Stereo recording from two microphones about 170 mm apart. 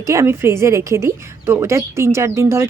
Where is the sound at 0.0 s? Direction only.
15° right (ahead or behind).